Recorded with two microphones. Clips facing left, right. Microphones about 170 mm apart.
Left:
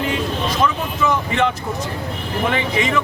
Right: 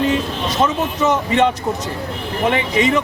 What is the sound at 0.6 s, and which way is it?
Speech, 20° right (ahead or behind).